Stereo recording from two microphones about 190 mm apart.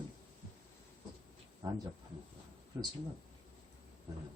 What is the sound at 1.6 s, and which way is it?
Speech, 20° right (ahead or behind).